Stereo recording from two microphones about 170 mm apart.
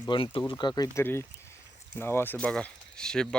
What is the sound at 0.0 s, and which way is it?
Speech, 30° left (ahead or behind).